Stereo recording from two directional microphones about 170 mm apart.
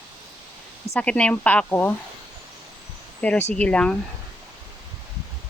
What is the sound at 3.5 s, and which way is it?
Speech, 5° left (ahead or behind).